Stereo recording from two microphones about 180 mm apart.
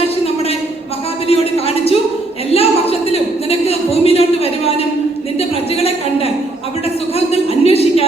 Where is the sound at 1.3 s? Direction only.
35° left (ahead or behind).